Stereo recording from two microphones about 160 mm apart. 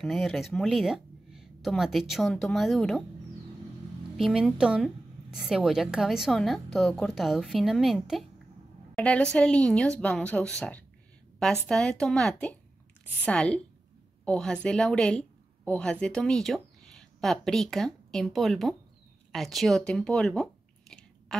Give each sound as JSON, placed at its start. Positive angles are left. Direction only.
{"t": 0.0, "sound": "speech", "side_deg": 0}
{"t": 4.2, "sound": "a woman's voice", "side_deg": 0}
{"t": 21.3, "sound": "duck", "side_deg": 0}